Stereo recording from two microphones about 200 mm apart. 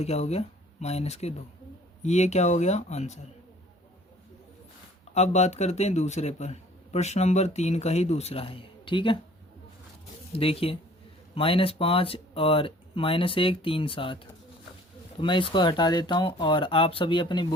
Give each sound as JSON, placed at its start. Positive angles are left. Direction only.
{"t": 0.0, "sound": "speech", "side_deg": 35}
{"t": 5.1, "sound": "speech", "side_deg": 35}
{"t": 10.3, "sound": "speech", "side_deg": 30}
{"t": 15.2, "sound": "speech", "side_deg": 25}